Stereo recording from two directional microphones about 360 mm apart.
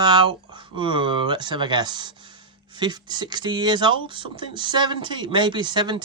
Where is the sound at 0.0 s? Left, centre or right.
Centre.